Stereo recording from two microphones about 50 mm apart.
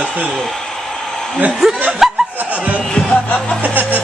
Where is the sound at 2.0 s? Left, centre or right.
Centre.